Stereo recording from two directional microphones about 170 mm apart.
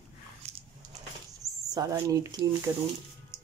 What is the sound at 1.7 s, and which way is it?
Speech, 20° right (ahead or behind).